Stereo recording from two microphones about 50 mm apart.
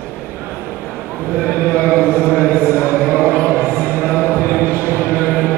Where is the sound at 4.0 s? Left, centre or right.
Right.